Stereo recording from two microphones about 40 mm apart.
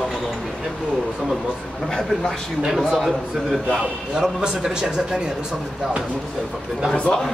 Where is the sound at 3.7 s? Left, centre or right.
Centre.